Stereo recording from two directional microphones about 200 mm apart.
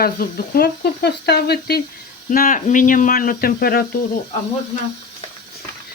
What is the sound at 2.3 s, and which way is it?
Speech, 40° left (ahead or behind).